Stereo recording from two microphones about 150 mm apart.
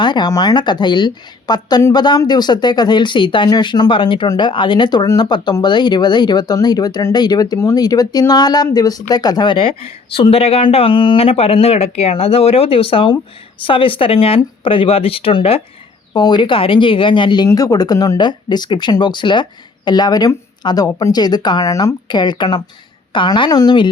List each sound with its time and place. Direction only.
0.0 s speech: 30° left (ahead or behind)